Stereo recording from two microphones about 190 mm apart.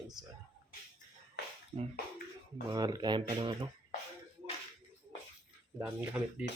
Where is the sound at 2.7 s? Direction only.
20° right (ahead or behind).